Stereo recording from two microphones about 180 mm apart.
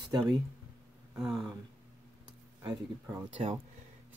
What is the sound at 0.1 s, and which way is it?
Speech, 20° right (ahead or behind).